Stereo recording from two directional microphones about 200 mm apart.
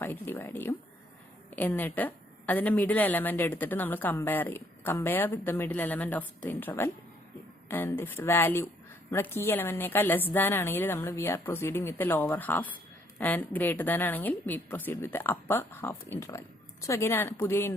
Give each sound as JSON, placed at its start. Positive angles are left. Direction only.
{"t": 0.0, "sound": "a woman's voice", "side_deg": 10}